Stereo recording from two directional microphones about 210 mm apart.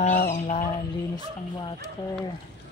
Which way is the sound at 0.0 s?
35° left (ahead or behind).